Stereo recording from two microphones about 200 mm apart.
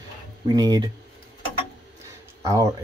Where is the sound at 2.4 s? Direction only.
15° right (ahead or behind).